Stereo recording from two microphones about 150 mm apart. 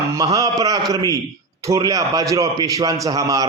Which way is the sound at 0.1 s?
25° right (ahead or behind).